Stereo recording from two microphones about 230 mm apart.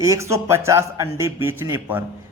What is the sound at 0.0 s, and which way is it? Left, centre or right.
A man's voice, centre.